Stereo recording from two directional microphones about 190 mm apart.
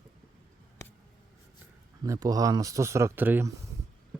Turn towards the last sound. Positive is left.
turn(degrees=-10)  # may be behind; listen again after turning